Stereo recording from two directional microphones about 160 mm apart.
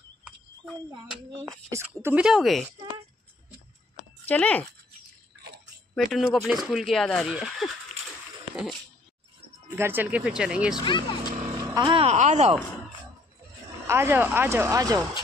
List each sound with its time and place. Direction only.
1.4 s speech: 15° right (ahead or behind)
2.2 s speech: centre (ahead or behind)
4.3 s speech: 10° left (ahead or behind)
5.9 s speech: centre (ahead or behind)
9.8 s speech: 15° right (ahead or behind)
10.8 s speech: 30° left (ahead or behind)
11.5 s vehicle: 20° right (ahead or behind)
11.9 s speech: 40° right (ahead or behind)
13.8 s speech: 15° right (ahead or behind)